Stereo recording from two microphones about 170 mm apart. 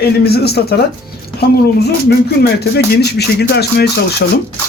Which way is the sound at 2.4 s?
75° left (ahead or behind).